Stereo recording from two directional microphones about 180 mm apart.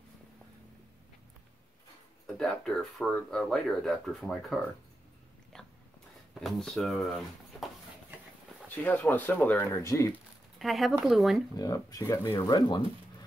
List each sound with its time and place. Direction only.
2.2 s speech: centre (ahead or behind)
5.5 s a sound: 5° left (ahead or behind)
6.4 s speech: centre (ahead or behind)
8.6 s speech: 10° left (ahead or behind)
10.6 s speech: centre (ahead or behind)
11.5 s speech: 20° left (ahead or behind)